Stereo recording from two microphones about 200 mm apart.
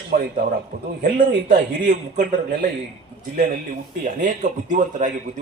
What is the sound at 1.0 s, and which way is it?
A man's voice, 45° right (ahead or behind).